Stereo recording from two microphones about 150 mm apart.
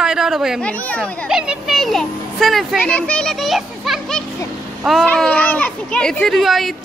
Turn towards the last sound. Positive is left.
turn(degrees=0)  # may be behind; listen again after turning